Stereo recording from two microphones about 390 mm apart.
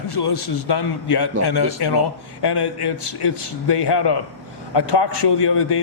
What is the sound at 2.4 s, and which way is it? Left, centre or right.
A man's voice, left.